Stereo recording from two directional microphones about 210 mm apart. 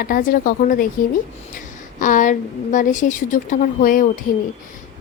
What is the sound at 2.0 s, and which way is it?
A woman's voice, 40° left (ahead or behind).